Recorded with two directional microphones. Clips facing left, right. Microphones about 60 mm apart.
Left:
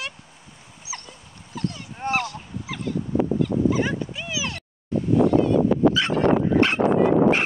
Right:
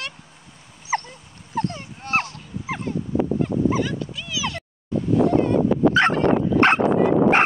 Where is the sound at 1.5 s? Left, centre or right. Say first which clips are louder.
Right 4 dB; right.